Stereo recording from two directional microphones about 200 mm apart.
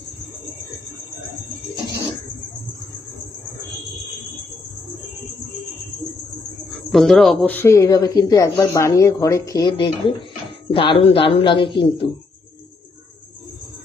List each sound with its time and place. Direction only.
6.9 s a man's voice: centre (ahead or behind); by 12.1 s 25° left (ahead or behind)